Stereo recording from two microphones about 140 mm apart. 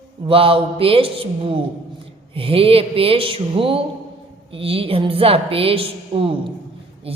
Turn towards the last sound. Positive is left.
turn(degrees=-40)  # may be behind; listen again after turning